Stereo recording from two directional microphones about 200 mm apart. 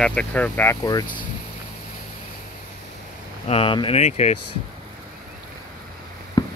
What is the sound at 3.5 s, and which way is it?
Speech, 25° left (ahead or behind).